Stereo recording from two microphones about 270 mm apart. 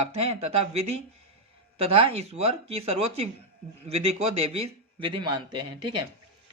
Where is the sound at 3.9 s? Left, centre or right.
Right.